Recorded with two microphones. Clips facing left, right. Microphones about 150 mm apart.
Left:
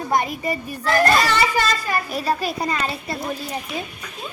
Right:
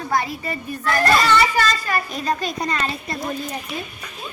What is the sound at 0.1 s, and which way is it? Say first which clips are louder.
Speech: left 2 dB; 15° left (ahead or behind).